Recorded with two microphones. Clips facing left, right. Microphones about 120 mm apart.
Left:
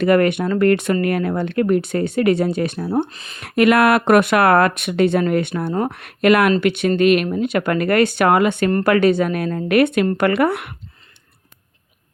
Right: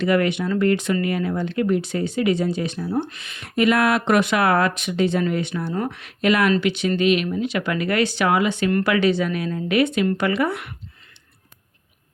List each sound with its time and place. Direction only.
0.0 s speech: 55° left (ahead or behind)
3.1 s speech: 35° left (ahead or behind)
3.4 s speech: 70° left (ahead or behind)